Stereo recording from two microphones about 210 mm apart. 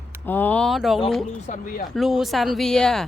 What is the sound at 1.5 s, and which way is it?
Speech, 40° left (ahead or behind).